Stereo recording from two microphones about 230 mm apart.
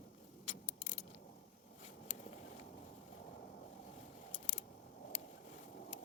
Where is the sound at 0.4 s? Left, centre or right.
Left.